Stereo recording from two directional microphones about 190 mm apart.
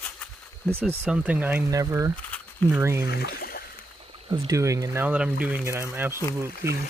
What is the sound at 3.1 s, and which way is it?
Speech, 55° left (ahead or behind).